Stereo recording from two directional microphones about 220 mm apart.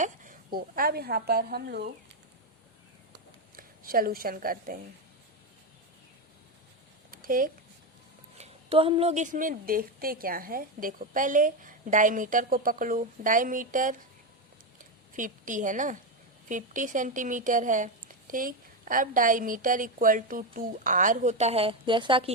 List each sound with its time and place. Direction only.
0.0 s speech: 40° right (ahead or behind)
3.5 s a woman's voice: 40° right (ahead or behind)
7.1 s a sound: 40° right (ahead or behind)
8.4 s speech: 25° right (ahead or behind)
15.1 s a woman's voice: 35° right (ahead or behind)